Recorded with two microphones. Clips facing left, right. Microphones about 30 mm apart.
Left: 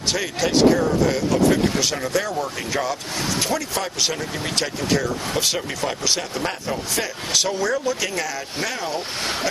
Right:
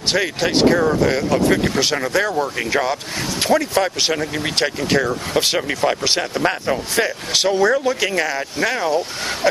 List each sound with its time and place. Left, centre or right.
0.1 s speech: right
6.4 s a man's voice: right
7.3 s speech: right